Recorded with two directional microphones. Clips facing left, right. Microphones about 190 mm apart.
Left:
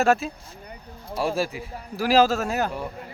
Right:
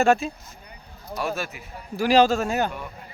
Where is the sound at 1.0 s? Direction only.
30° left (ahead or behind).